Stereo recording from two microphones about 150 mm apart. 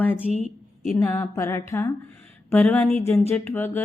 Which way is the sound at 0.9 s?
20° left (ahead or behind).